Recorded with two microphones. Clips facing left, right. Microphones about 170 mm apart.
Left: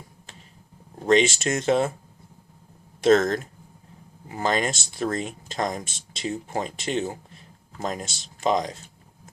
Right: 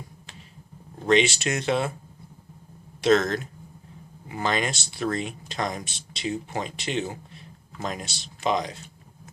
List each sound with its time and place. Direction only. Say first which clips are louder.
1.0 s speech: left 2 dB; 45° left (ahead or behind)
3.0 s speech: left 2 dB; 45° left (ahead or behind)